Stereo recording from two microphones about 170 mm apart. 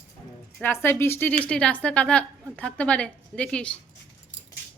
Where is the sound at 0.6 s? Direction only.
15° left (ahead or behind).